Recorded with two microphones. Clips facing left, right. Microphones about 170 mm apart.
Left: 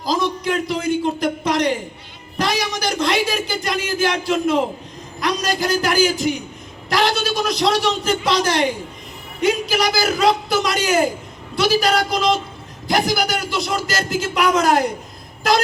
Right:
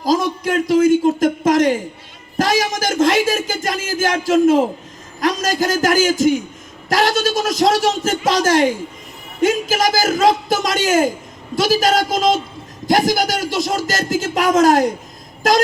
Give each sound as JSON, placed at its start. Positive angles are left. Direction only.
{"t": 0.0, "sound": "a man's voice", "side_deg": -45}